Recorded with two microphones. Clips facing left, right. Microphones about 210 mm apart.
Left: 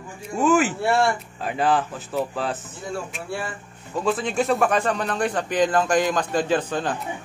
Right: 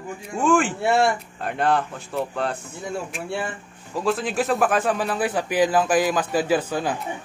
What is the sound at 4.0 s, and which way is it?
Speech, centre (ahead or behind).